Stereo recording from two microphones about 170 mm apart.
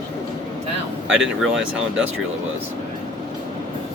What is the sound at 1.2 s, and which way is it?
Speech, 5° right (ahead or behind).